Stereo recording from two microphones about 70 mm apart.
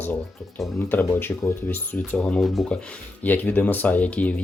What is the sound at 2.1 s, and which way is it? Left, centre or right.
Speech, centre.